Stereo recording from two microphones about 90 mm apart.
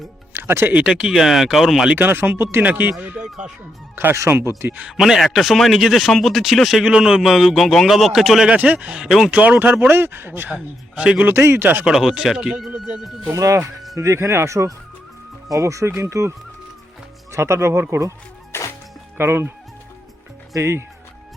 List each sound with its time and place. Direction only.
0.3 s speech: 25° right (ahead or behind)
0.7 s speech: 10° right (ahead or behind)
1.9 s speech: 20° right (ahead or behind)
3.9 s speech: 30° right (ahead or behind)
4.9 s speech: 5° right (ahead or behind)
8.5 s speech: 15° right (ahead or behind)
9.3 s speech: 15° right (ahead or behind)
10.5 s speech: 10° right (ahead or behind)
11.3 s speech: 25° right (ahead or behind)
11.9 s speech: 5° right (ahead or behind)
13.3 s speech: 40° right (ahead or behind)
17.3 s speech: 30° right (ahead or behind)
18.5 s music: 25° left (ahead or behind)
19.1 s speech: 25° right (ahead or behind)